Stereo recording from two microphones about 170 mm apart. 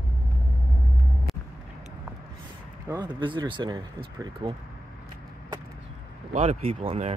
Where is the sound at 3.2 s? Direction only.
30° right (ahead or behind).